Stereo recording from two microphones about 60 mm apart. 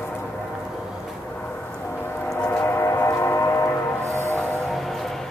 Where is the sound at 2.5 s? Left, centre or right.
Left.